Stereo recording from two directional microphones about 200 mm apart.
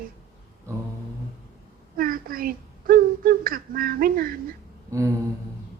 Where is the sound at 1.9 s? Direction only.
45° right (ahead or behind).